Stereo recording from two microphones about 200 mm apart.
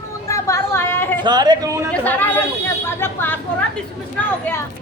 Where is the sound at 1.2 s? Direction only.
20° right (ahead or behind).